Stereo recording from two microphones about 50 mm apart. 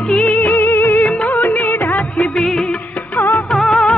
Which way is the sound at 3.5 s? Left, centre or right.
Centre.